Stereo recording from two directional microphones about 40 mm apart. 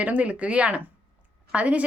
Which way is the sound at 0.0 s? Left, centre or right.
Right.